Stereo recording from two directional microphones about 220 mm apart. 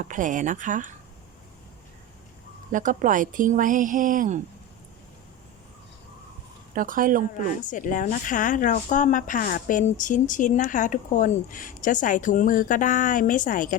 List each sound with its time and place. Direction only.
0.0 s speech: 35° right (ahead or behind)
2.7 s speech: 35° right (ahead or behind)
6.7 s speech: 40° right (ahead or behind)
7.6 s speech: 35° left (ahead or behind)